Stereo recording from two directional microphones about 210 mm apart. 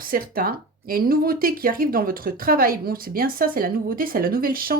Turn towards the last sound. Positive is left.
turn(degrees=-45)  # may be behind; listen again after turning